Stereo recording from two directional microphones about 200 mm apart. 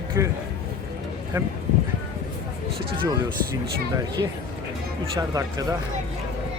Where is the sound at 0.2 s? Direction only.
15° right (ahead or behind).